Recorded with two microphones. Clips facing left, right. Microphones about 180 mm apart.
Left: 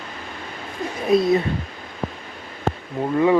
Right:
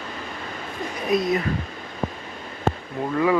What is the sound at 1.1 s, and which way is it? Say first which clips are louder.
Speech: left 5 dB; 25° left (ahead or behind).